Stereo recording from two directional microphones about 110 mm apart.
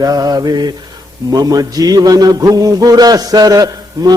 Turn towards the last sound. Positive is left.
turn(degrees=-35)  # may be behind; listen again after turning